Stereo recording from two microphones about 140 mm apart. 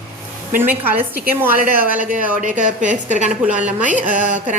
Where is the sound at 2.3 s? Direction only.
65° right (ahead or behind).